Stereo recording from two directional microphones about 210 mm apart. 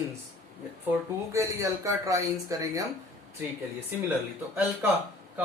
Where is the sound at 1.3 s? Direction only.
15° right (ahead or behind).